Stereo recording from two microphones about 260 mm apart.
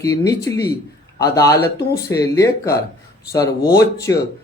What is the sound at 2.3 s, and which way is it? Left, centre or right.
Speech, centre.